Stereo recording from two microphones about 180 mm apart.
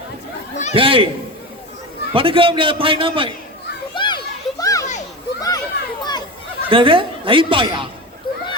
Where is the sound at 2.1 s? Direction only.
30° right (ahead or behind).